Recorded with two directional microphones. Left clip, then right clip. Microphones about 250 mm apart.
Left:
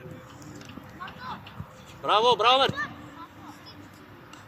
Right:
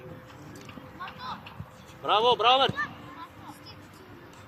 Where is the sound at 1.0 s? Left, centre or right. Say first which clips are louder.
Even; right.